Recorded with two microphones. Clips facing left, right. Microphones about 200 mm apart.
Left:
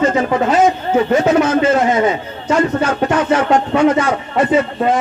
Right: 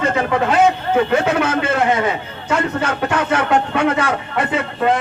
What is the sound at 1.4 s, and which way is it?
Speech, 60° right (ahead or behind).